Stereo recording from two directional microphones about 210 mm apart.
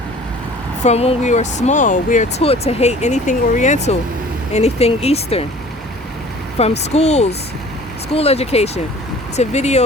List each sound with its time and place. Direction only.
0.9 s speech: 30° left (ahead or behind)
6.6 s speech: 30° left (ahead or behind)